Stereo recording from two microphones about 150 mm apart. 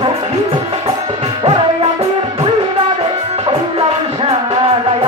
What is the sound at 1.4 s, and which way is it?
Music, 35° right (ahead or behind).